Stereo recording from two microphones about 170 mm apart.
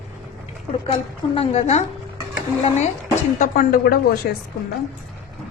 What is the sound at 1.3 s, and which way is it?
Speech, 40° left (ahead or behind).